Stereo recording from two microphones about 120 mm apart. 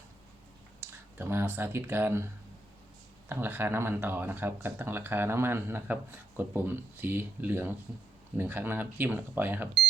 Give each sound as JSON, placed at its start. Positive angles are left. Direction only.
{"t": 0.8, "sound": "speech", "side_deg": -20}
{"t": 3.2, "sound": "speech", "side_deg": -15}